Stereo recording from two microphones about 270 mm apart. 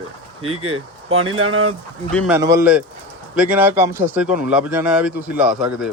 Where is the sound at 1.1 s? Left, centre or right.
Right.